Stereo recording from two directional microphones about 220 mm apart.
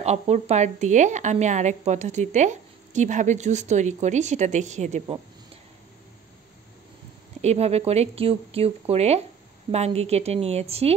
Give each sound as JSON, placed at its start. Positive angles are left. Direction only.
{"t": 0.0, "sound": "speech", "side_deg": -30}
{"t": 7.4, "sound": "speech", "side_deg": -30}